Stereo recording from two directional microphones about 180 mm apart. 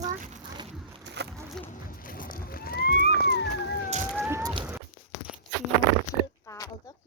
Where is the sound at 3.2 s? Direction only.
70° left (ahead or behind).